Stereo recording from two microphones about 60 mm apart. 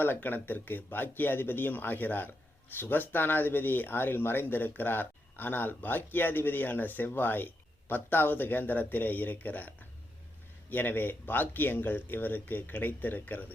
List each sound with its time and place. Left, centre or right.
0.0 s speech: left